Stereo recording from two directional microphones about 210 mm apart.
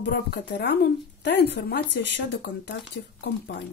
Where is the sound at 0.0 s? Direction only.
50° left (ahead or behind).